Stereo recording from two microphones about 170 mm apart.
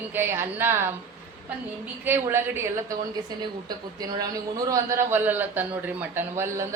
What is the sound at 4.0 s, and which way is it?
A man's voice, 20° right (ahead or behind).